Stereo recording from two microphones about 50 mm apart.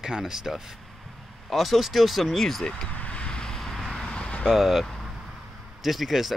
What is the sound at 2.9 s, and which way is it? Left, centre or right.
Vehicle, left.